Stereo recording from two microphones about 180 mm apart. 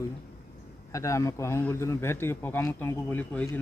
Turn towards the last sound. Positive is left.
turn(degrees=10)  # may be behind; listen again after turning